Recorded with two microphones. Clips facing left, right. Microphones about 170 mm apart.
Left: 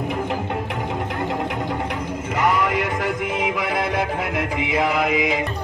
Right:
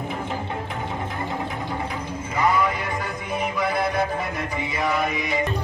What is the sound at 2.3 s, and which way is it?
Music, 85° left.